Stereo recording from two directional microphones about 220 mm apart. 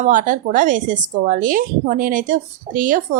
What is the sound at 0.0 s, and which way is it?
Speech, 35° right (ahead or behind).